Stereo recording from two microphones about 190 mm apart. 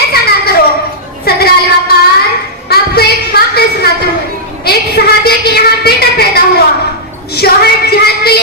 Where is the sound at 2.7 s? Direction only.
55° left (ahead or behind).